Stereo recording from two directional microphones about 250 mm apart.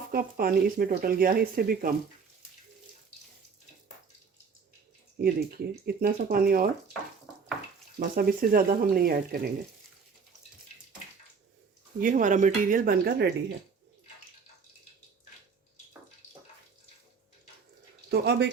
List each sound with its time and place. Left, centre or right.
0.1 s speech: right
5.2 s speech: right
7.9 s speech: right
11.9 s speech: right
18.1 s speech: right